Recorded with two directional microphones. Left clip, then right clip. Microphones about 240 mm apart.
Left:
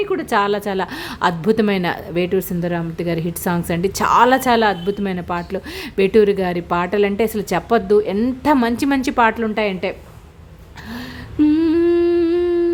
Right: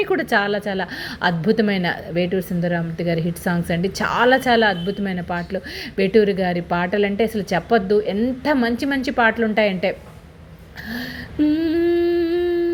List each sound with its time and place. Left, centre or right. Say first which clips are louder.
0.0 s a woman's voice: right 1 dB; centre
0.3 s a woman's voice: left 2 dB; centre
10.9 s humming: left 3 dB; centre